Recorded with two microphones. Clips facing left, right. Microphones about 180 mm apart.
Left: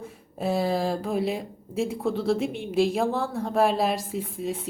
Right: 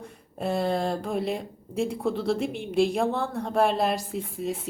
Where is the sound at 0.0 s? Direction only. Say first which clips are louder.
Left 2 dB; centre (ahead or behind).